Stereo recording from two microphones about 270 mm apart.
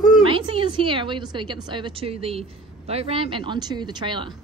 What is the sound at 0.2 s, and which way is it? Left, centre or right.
A woman's voice, centre.